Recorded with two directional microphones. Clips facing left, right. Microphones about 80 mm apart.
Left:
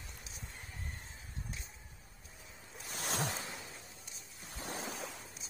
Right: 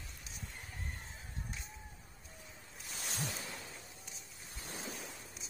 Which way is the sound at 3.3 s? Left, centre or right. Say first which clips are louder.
Left 2 dB; centre.